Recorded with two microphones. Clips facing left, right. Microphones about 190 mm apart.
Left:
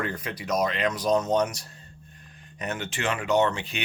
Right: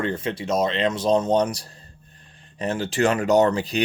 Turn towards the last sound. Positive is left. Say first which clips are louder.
# right 5 dB
turn(degrees=-35)  # may be behind; listen again after turning